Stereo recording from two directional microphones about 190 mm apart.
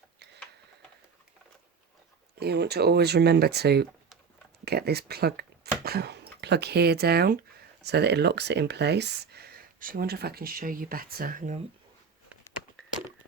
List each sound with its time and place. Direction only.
2.4 s speech: 60° right (ahead or behind); by 11.6 s 40° right (ahead or behind)